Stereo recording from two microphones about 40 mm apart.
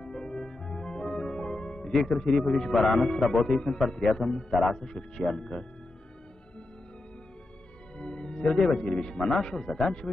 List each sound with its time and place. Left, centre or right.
0.0 s music: left
2.0 s speech: centre
3.4 s speech: centre
8.0 s music: left
8.8 s speech: centre